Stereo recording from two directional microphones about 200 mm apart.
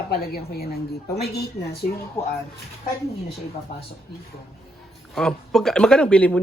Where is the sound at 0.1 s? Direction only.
50° left (ahead or behind).